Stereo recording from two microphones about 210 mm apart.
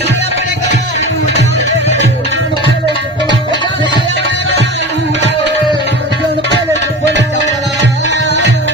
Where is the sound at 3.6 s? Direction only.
20° left (ahead or behind).